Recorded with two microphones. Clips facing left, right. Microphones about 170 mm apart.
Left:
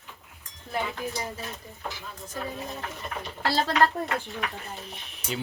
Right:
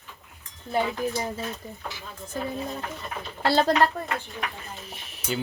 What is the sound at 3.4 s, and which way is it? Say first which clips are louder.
Speech: right 5 dB; 60° right (ahead or behind).